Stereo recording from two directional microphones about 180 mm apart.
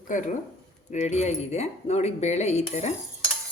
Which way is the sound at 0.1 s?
45° left (ahead or behind).